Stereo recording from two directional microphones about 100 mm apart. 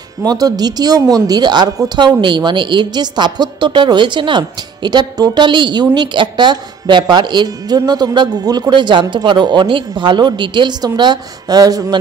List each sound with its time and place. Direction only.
0.2 s a woman's voice: 40° right (ahead or behind)